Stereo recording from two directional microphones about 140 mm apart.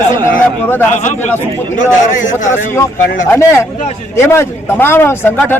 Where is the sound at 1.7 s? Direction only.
70° left (ahead or behind).